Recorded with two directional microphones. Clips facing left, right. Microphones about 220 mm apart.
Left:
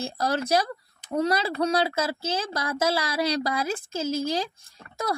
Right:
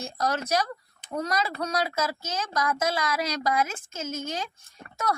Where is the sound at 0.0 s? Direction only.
30° left (ahead or behind).